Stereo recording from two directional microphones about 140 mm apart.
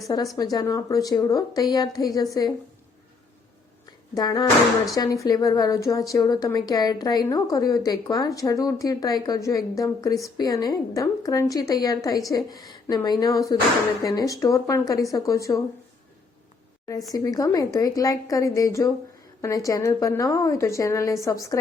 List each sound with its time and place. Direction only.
0.3 s a woman's voice: 25° left (ahead or behind)
4.1 s a woman's voice: 30° left (ahead or behind)
17.2 s a woman's voice: 25° left (ahead or behind)